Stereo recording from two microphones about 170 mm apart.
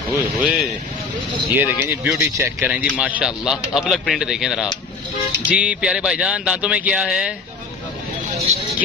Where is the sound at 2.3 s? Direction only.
15° right (ahead or behind).